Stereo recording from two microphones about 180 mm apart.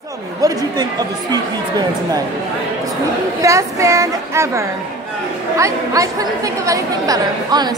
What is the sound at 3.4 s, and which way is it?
A man's voice, 15° right (ahead or behind).